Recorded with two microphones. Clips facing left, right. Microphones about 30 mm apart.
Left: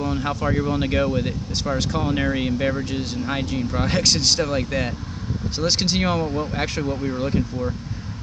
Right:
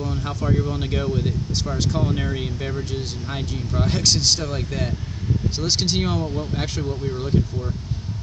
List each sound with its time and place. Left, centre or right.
0.0 s speech: left
0.7 s speech: left
6.8 s speech: left